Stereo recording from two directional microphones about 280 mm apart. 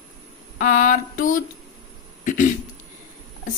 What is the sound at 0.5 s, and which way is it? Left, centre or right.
Speech, left.